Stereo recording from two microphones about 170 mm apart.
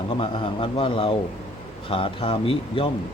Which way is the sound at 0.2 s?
30° left (ahead or behind).